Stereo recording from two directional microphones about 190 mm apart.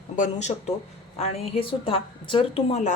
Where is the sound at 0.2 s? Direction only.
35° left (ahead or behind).